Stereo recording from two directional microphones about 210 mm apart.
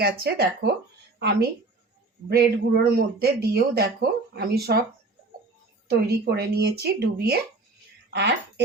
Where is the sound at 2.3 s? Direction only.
50° right (ahead or behind).